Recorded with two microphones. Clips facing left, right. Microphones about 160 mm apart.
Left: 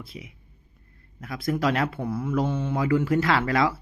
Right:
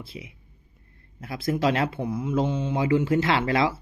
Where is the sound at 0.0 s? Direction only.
30° right (ahead or behind).